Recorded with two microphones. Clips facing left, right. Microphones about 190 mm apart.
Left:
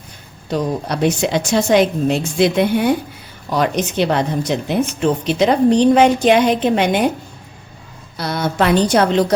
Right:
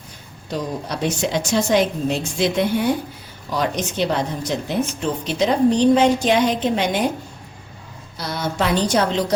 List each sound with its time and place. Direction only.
0.5 s a woman's voice: 65° left (ahead or behind)
8.2 s a woman's voice: 60° left (ahead or behind)